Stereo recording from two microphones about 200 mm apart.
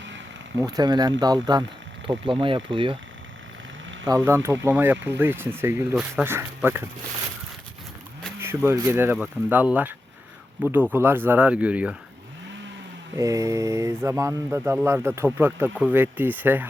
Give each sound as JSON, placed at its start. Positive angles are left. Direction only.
{"t": 0.6, "sound": "speech", "side_deg": -20}
{"t": 4.0, "sound": "speech", "side_deg": -15}
{"t": 8.4, "sound": "speech", "side_deg": -10}
{"t": 13.1, "sound": "speech", "side_deg": -15}